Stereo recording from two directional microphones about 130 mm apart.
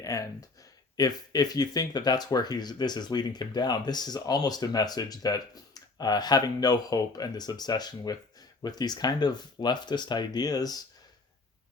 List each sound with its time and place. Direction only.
0.0 s speech: 25° left (ahead or behind)